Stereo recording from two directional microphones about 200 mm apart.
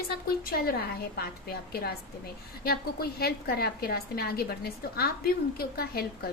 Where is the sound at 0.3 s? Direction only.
50° left (ahead or behind).